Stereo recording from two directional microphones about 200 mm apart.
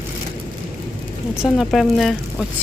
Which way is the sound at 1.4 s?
Centre (ahead or behind).